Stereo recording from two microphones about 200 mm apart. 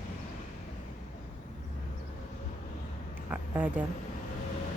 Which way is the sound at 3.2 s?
10° right (ahead or behind).